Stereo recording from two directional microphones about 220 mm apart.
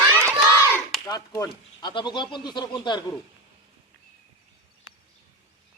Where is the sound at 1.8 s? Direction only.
20° left (ahead or behind).